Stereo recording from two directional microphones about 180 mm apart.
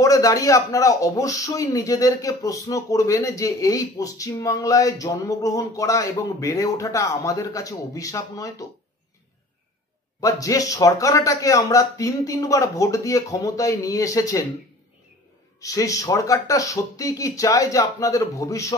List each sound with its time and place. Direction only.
0.0 s a man's voice: 20° left (ahead or behind)
10.2 s a man's voice: 20° left (ahead or behind)
15.6 s a man's voice: 20° left (ahead or behind)